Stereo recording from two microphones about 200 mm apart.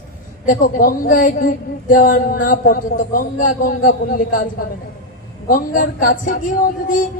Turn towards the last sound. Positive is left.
turn(degrees=40)  # may be behind; listen again after turning